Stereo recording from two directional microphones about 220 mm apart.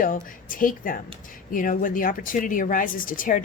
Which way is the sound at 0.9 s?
40° left (ahead or behind).